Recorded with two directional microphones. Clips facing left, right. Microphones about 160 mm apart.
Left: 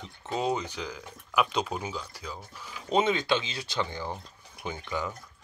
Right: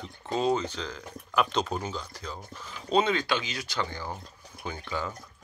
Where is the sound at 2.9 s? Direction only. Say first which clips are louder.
Even; 20° left (ahead or behind).